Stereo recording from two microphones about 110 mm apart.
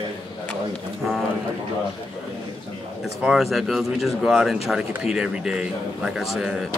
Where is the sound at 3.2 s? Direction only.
Centre (ahead or behind).